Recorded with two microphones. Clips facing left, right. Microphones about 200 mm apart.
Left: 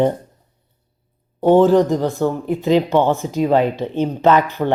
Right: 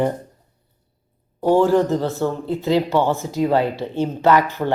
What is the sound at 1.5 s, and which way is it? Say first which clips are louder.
Speech: left 3 dB; 20° left (ahead or behind).